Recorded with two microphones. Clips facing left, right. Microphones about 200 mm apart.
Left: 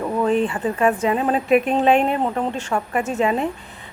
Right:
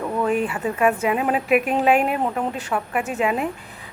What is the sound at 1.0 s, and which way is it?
Speech, 10° right (ahead or behind).